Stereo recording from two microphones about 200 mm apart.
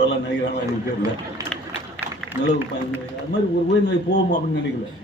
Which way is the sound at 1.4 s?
15° right (ahead or behind).